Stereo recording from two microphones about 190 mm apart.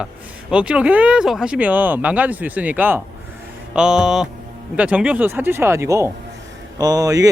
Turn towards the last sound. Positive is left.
turn(degrees=-20)  # may be behind; listen again after turning